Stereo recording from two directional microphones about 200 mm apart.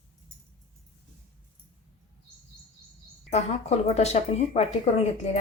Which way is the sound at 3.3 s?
30° left (ahead or behind).